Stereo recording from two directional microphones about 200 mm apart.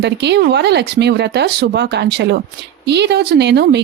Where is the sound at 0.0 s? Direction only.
60° right (ahead or behind).